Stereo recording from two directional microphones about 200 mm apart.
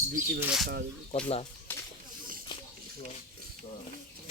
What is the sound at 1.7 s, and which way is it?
Snake, 10° left (ahead or behind).